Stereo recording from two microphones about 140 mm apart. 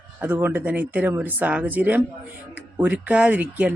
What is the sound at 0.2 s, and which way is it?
Speech, 15° right (ahead or behind).